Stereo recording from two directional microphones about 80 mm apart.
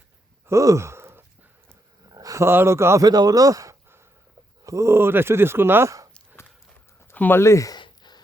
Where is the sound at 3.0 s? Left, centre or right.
Right.